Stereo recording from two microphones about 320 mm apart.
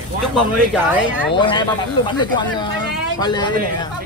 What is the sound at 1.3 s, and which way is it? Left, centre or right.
Speech, centre.